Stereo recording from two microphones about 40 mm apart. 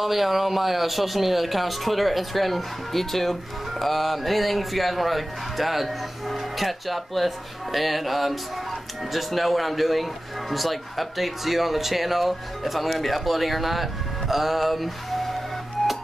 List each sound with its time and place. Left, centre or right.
0.0 s speech: centre